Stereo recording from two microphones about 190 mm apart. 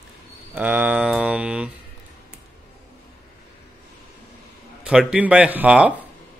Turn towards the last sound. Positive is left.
turn(degrees=-5)  # may be behind; listen again after turning